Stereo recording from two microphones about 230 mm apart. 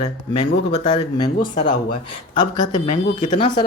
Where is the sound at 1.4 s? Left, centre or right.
Left.